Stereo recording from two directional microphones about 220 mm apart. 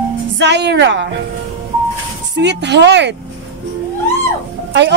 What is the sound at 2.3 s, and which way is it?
Speech, 50° right (ahead or behind).